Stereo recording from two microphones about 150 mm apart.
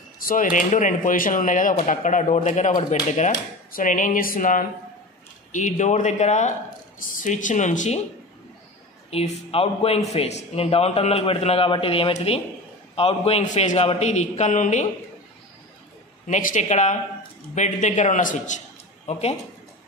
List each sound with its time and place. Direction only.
0.2 s a man's voice: 65° left (ahead or behind); by 3.3 s 50° left (ahead or behind)
3.7 s a man's voice: 60° left (ahead or behind)
7.0 s speech: 60° left (ahead or behind)
9.1 s a man's voice: 40° left (ahead or behind)
16.3 s speech: 60° left (ahead or behind)